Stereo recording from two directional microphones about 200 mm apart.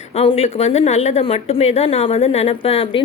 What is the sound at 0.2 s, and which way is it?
Speech, 30° left (ahead or behind).